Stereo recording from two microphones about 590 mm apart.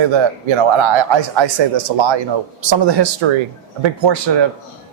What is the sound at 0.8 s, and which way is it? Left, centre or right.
Speech, right.